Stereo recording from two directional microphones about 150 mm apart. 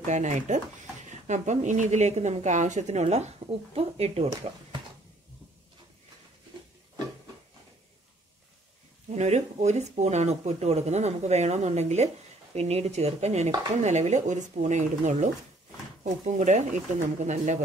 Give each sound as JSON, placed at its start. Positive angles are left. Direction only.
{"t": 0.0, "sound": "a woman's voice", "side_deg": -55}
{"t": 9.1, "sound": "a woman's voice", "side_deg": -50}